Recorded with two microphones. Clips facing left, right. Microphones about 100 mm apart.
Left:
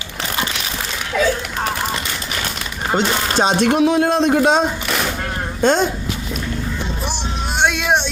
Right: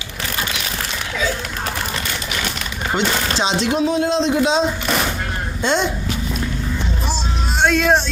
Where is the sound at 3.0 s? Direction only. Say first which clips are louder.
Left 3 dB; 45° left (ahead or behind).